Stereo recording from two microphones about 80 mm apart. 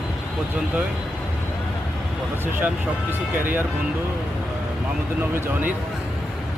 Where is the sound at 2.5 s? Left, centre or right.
Right.